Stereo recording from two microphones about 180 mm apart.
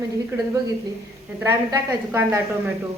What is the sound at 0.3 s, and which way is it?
Speech, 10° right (ahead or behind).